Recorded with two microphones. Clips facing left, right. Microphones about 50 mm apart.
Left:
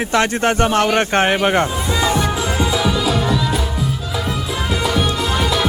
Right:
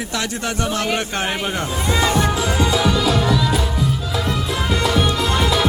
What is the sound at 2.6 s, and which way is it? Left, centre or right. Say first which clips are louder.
Music: even; centre.